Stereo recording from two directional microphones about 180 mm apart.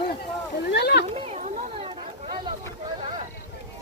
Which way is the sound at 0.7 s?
65° left (ahead or behind).